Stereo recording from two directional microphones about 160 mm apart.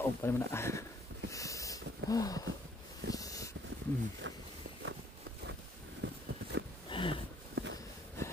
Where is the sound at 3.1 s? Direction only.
20° left (ahead or behind).